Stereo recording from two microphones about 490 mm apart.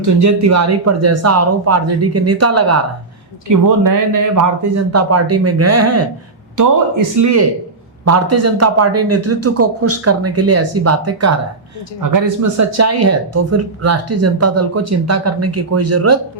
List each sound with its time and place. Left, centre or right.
0.0 s a man's voice: right